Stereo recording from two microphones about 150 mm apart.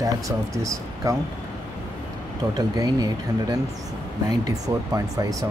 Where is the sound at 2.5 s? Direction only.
25° right (ahead or behind).